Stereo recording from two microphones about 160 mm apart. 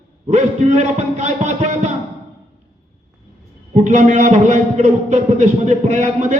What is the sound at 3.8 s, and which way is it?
A man's voice, 50° right (ahead or behind).